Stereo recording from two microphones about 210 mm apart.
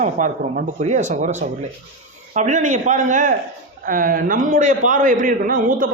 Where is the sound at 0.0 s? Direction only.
35° right (ahead or behind).